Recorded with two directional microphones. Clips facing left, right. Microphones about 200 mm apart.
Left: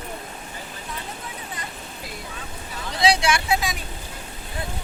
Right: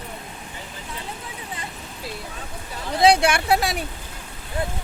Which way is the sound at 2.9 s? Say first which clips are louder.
Right 4 dB; 55° right (ahead or behind).